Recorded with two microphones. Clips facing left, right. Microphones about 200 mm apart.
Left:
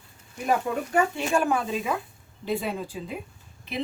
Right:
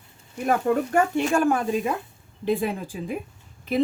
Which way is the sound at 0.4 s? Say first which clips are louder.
Right 4 dB; 50° right (ahead or behind).